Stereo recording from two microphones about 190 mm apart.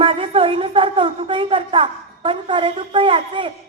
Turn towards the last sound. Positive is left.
turn(degrees=-25)  # may be behind; listen again after turning